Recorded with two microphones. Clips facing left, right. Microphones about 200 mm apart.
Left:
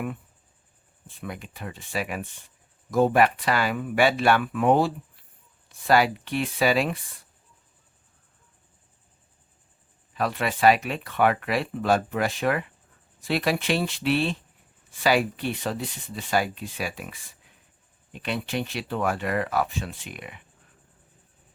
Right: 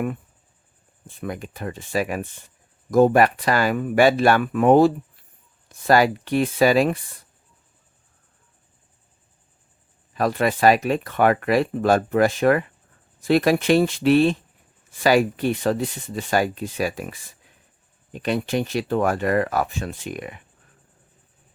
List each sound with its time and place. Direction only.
1.0 s speech: 45° right (ahead or behind)
10.2 s speech: 45° right (ahead or behind)